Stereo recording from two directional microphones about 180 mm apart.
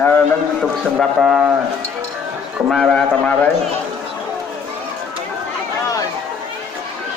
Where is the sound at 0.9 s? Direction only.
5° right (ahead or behind).